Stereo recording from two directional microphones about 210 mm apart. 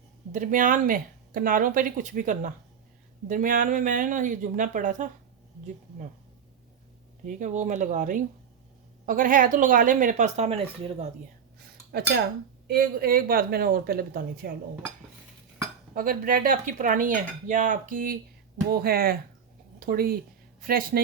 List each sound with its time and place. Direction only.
0.3 s speech: 40° right (ahead or behind)
7.3 s speech: 35° right (ahead or behind)
11.9 s cutlery: 50° right (ahead or behind)
12.6 s a woman's voice: 45° right (ahead or behind)
16.0 s a woman's voice: 40° right (ahead or behind)